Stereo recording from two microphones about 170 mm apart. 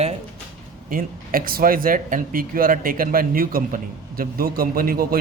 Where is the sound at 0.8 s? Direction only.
55° right (ahead or behind).